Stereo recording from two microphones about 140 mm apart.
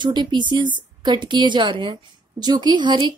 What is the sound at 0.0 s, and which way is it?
Speech, 30° right (ahead or behind).